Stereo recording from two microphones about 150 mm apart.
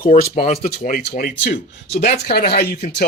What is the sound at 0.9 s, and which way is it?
Speech, 80° left.